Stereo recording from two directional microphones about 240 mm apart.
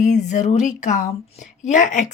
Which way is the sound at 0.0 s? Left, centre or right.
Left.